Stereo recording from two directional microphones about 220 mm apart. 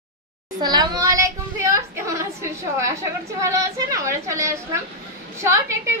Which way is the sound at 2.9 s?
15° right (ahead or behind).